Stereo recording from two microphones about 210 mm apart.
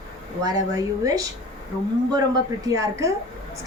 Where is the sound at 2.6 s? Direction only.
15° right (ahead or behind).